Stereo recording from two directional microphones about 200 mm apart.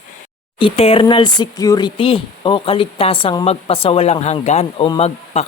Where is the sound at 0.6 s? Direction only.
25° left (ahead or behind).